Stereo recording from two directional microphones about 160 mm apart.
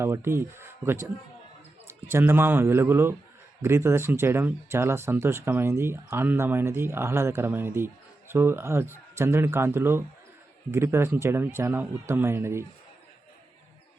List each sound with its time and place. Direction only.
0.0 s speech: 15° right (ahead or behind)